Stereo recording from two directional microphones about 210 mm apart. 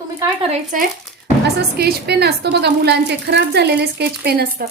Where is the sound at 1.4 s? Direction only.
50° right (ahead or behind).